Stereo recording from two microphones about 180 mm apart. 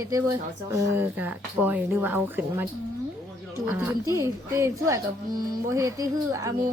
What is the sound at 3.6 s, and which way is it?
A woman's voice, 10° right (ahead or behind).